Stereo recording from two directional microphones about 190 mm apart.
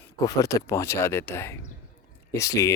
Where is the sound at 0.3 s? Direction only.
15° left (ahead or behind).